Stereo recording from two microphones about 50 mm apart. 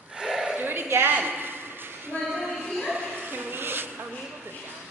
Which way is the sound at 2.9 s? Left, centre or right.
Right.